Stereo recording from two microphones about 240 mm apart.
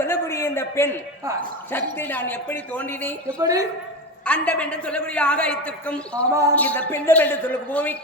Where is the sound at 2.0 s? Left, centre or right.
Centre.